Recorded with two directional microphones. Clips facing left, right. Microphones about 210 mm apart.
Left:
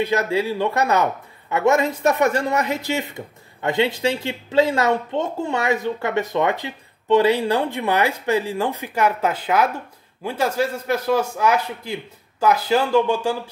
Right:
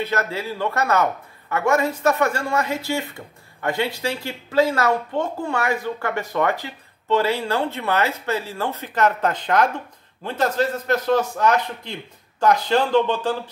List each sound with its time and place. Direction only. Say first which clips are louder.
0.0 s a man's voice: left 5 dB; 15° left (ahead or behind)